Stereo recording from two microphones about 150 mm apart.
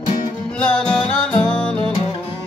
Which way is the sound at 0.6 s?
5° left (ahead or behind).